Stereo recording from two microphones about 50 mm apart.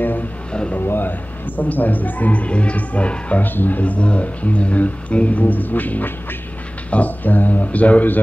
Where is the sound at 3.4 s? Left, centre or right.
Left.